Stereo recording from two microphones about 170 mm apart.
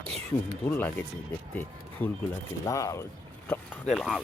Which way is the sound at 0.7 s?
10° left (ahead or behind).